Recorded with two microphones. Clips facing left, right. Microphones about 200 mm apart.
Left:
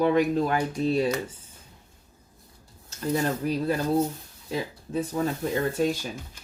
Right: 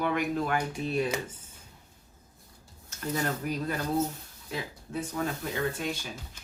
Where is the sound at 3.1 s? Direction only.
30° left (ahead or behind).